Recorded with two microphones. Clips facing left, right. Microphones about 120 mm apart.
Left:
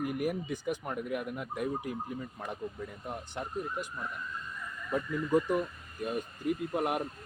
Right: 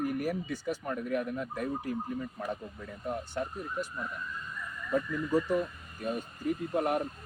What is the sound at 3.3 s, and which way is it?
Speech, 15° left (ahead or behind).